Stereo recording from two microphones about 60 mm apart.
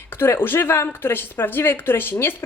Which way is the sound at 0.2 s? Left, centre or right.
Left.